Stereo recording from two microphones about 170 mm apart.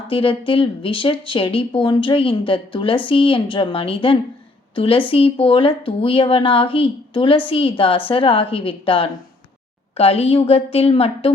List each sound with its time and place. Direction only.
0.1 s speech: 30° left (ahead or behind)